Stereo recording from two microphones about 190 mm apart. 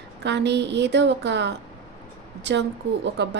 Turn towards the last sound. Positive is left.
turn(degrees=-65)  # may be behind; listen again after turning